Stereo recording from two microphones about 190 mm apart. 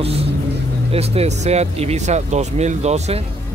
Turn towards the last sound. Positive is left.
turn(degrees=-35)  # may be behind; listen again after turning